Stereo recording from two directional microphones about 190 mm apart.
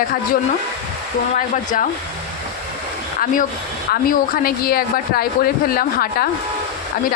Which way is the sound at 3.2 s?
45° left (ahead or behind).